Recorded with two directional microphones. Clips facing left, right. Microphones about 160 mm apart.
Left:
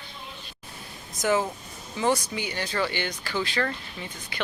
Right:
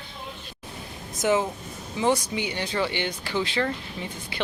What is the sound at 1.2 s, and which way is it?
Speech, 20° right (ahead or behind).